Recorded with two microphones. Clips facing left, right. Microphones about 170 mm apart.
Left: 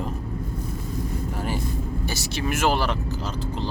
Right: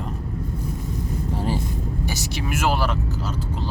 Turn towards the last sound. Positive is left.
turn(degrees=-5)  # may be behind; listen again after turning